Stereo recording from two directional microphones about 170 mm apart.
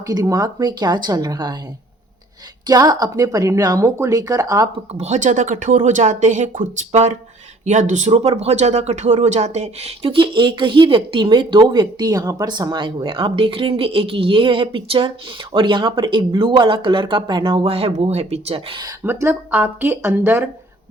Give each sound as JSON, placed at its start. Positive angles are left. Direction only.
{"t": 0.0, "sound": "speech", "side_deg": -20}
{"t": 2.6, "sound": "speech", "side_deg": -20}
{"t": 4.9, "sound": "speech", "side_deg": -45}
{"t": 19.0, "sound": "speech", "side_deg": -10}